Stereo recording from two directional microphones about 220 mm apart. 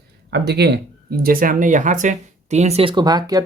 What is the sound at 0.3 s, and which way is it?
Speech, 45° right (ahead or behind).